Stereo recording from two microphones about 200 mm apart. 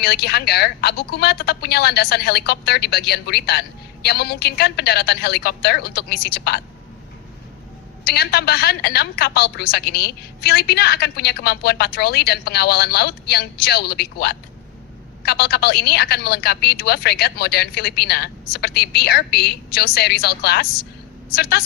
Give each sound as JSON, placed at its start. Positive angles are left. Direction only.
{"t": 0.0, "sound": "a woman's voice", "side_deg": 50}
{"t": 8.0, "sound": "a woman's voice", "side_deg": 50}